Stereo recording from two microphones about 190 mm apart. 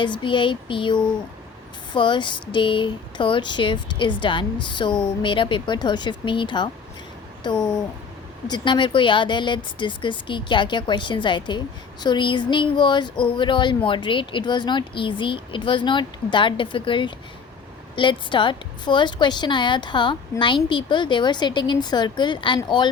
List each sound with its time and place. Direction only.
0.0 s a woman's voice: 25° left (ahead or behind)
7.5 s speech: 5° left (ahead or behind)
8.4 s a woman's voice: 25° left (ahead or behind)